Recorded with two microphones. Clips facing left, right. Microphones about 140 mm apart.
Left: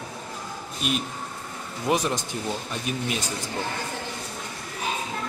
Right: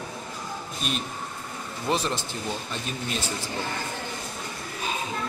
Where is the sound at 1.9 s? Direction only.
15° left (ahead or behind).